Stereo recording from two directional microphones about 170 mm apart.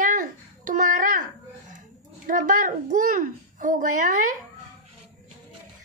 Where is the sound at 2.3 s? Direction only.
50° right (ahead or behind).